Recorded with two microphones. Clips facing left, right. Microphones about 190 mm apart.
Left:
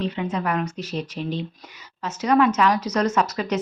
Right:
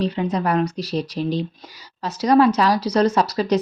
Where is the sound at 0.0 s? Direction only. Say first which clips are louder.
Right 4 dB; 35° right (ahead or behind).